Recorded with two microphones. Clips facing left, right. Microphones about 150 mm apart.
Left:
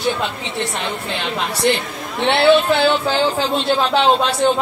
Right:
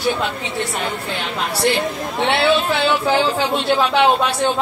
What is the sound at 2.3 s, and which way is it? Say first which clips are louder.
Music: left 5 dB; centre (ahead or behind).